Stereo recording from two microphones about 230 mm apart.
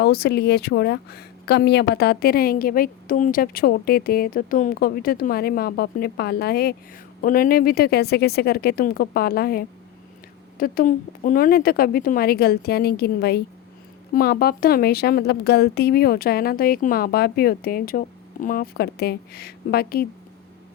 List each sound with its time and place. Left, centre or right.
0.0 s speech: left